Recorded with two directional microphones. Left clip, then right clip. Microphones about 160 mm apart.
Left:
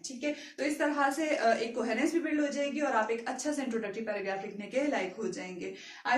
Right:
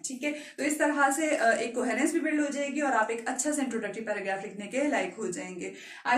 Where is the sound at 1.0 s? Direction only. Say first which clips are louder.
Right 3 dB; 15° right (ahead or behind).